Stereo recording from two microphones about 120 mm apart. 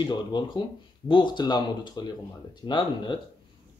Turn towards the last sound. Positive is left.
turn(degrees=40)  # may be behind; listen again after turning